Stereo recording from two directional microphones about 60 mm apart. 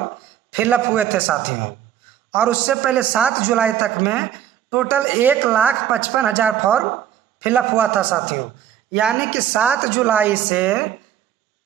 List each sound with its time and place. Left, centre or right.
0.5 s speech: right
2.3 s speech: centre